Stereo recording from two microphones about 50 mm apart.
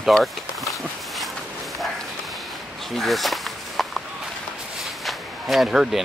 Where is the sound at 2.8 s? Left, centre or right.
Centre.